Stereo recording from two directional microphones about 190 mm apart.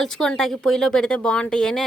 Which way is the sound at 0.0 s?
5° left (ahead or behind).